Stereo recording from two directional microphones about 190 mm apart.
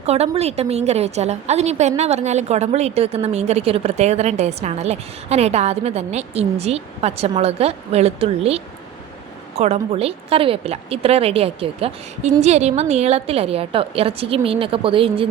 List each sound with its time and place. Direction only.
0.0 s a woman's voice: 35° right (ahead or behind)